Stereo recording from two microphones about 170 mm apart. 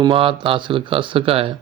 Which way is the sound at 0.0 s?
30° right (ahead or behind).